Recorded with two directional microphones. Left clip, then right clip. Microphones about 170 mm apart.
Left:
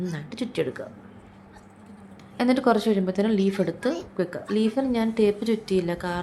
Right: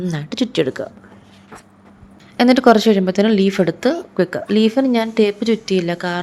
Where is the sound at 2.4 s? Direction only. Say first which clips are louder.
Right 10 dB; 40° right (ahead or behind).